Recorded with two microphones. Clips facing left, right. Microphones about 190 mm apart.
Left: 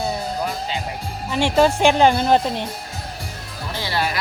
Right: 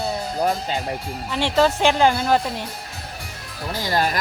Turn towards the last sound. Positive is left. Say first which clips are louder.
# right 2 dB
turn(degrees=-45)  # may be behind; listen again after turning